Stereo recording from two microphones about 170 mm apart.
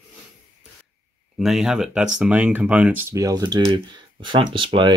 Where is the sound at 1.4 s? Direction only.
Centre (ahead or behind).